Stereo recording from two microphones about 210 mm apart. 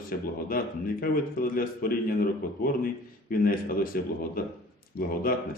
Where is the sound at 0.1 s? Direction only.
45° left (ahead or behind).